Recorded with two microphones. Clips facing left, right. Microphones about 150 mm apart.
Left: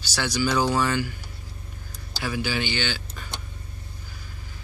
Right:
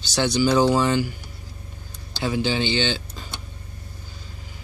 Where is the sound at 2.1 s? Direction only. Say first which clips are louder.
Right 5 dB; 20° right (ahead or behind).